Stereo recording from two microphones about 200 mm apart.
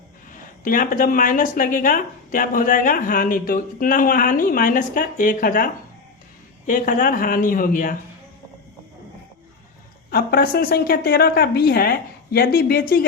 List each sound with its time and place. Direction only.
0.6 s speech: 40° left (ahead or behind)
10.1 s speech: 50° left (ahead or behind)